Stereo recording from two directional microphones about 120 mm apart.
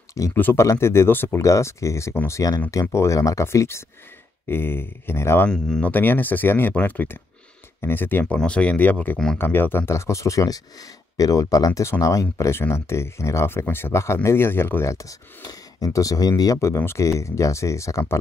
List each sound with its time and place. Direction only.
0.1 s speech: 25° left (ahead or behind)
5.5 s speech: 10° left (ahead or behind); by 18.2 s 25° left (ahead or behind)